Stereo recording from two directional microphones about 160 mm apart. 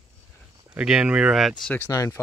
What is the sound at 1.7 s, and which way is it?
Speech, 15° left (ahead or behind).